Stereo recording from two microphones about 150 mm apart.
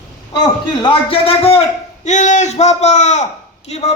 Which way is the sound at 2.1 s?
50° left (ahead or behind).